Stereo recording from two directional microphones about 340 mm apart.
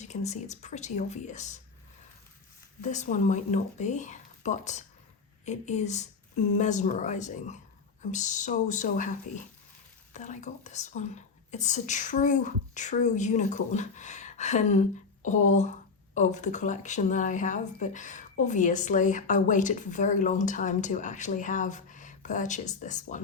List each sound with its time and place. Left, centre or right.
0.0 s speech: centre
2.8 s speech: left